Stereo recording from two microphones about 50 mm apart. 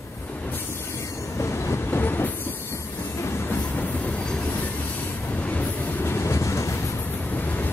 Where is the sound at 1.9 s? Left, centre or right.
Left.